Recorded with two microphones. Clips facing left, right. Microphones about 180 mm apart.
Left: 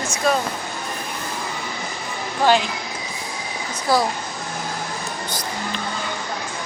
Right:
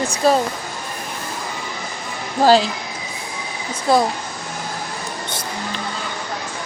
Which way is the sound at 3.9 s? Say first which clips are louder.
Right 3 dB; 25° right (ahead or behind).